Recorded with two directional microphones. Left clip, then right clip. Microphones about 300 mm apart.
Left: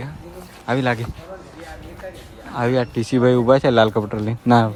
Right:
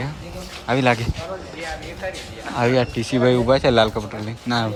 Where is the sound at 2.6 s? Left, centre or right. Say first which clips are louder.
Right 1 dB; centre.